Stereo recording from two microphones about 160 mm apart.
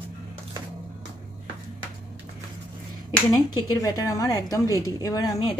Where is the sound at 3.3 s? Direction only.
20° left (ahead or behind).